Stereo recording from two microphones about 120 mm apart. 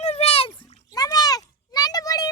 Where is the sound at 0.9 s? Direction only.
30° left (ahead or behind).